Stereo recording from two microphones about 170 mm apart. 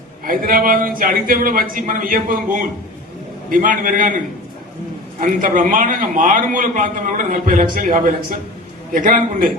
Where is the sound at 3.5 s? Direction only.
55° right (ahead or behind).